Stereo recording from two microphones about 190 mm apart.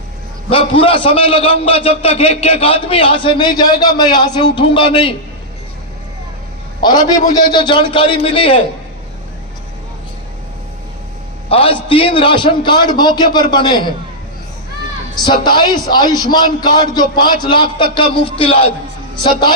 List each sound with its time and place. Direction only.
0.5 s a man's voice: 30° left (ahead or behind)
6.8 s a man's voice: 20° left (ahead or behind)
11.4 s a man's voice: 30° left (ahead or behind)
15.1 s a man's voice: 20° left (ahead or behind)